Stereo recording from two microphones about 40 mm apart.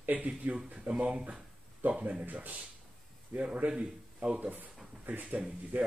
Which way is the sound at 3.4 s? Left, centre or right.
Right.